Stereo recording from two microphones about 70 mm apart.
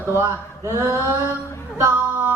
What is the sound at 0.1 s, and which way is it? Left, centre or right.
Speech, right.